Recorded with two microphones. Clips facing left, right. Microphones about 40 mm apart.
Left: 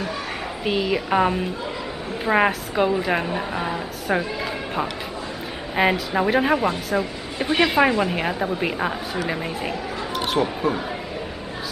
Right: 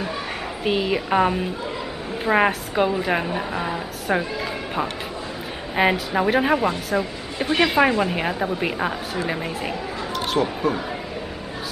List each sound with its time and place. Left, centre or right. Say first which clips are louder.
0.7 s speech: even; centre
5.8 s speech: even; centre